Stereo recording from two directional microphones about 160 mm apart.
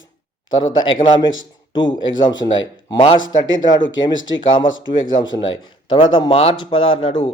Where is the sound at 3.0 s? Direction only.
30° left (ahead or behind).